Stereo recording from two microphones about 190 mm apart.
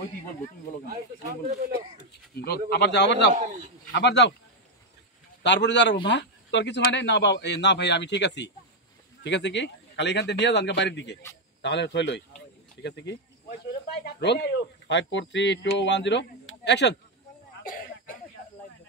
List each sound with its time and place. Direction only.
2.3 s a man's voice: 55° left (ahead or behind)
5.4 s a man's voice: 65° left (ahead or behind)
17.6 s cough: 50° left (ahead or behind)